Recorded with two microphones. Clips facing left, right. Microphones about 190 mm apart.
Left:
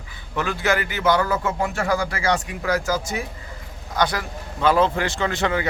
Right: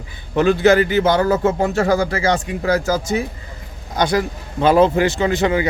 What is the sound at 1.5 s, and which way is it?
Speech, 40° right (ahead or behind).